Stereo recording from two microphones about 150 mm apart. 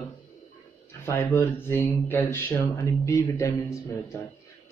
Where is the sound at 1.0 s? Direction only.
15° left (ahead or behind).